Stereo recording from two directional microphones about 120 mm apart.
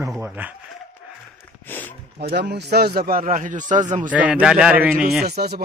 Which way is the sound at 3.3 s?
90° right.